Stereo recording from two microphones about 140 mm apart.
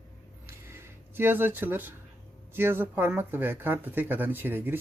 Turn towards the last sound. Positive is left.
turn(degrees=-15)  # may be behind; listen again after turning